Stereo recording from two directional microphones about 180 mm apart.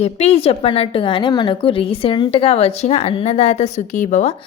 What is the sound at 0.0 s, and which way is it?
A woman's voice, 35° left (ahead or behind).